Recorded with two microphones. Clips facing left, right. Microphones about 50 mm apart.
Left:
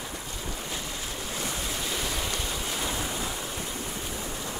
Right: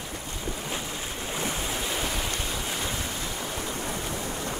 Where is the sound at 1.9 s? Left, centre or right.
Centre.